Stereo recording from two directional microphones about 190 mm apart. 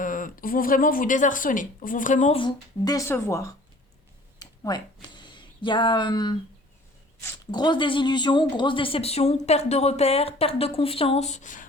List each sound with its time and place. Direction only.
0.0 s speech: 45° left (ahead or behind)
2.3 s speech: 25° left (ahead or behind)
4.4 s a sound: 20° left (ahead or behind)
7.2 s speech: 20° left (ahead or behind); by 11.6 s 40° left (ahead or behind)